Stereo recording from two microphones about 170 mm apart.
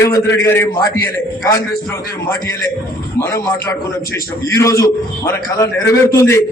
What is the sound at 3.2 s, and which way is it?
A man's voice, 15° left (ahead or behind).